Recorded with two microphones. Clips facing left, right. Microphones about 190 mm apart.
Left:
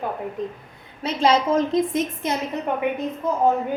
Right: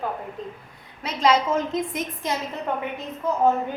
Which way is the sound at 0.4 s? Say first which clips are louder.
Left 6 dB; 15° left (ahead or behind).